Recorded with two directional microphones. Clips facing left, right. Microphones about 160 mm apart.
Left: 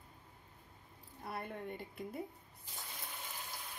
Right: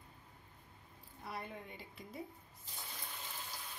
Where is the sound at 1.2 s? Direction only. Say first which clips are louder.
Left 3 dB; 55° left (ahead or behind).